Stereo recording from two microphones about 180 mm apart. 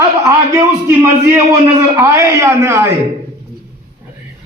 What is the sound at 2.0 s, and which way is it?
Speech, 15° right (ahead or behind).